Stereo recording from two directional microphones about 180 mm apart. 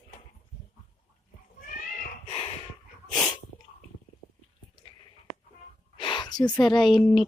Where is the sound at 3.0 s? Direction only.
Centre (ahead or behind).